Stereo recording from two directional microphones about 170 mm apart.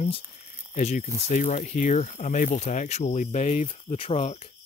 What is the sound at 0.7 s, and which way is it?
Speech, 50° left (ahead or behind).